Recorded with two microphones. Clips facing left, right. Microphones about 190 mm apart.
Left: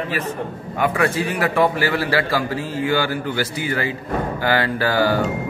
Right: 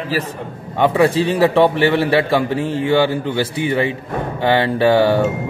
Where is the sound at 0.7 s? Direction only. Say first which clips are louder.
Right 6 dB; 30° right (ahead or behind).